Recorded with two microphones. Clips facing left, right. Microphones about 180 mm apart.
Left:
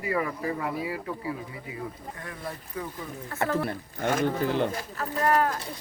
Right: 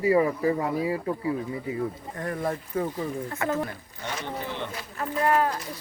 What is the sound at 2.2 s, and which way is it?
Speech, 45° right (ahead or behind).